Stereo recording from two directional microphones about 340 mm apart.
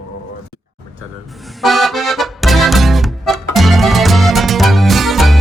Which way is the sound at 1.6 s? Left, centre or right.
Centre.